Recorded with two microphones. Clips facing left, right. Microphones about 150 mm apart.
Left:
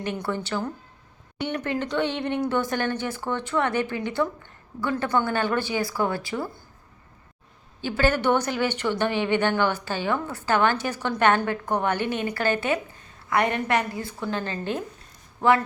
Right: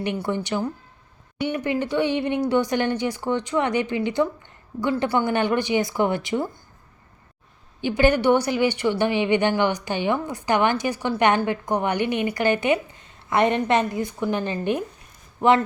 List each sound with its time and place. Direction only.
0.0 s speech: 15° right (ahead or behind)
7.8 s speech: 15° right (ahead or behind)